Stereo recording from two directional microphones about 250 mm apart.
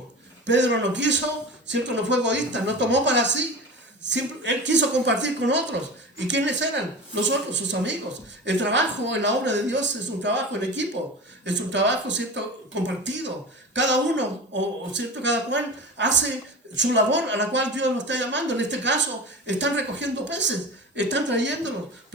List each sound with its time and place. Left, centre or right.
0.4 s speech: right